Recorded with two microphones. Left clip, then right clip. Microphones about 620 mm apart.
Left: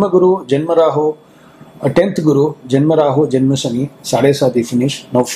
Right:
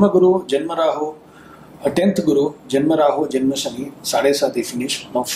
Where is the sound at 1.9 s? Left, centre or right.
Left.